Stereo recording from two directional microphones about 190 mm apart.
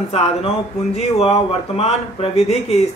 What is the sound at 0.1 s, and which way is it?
Speech, 30° left (ahead or behind).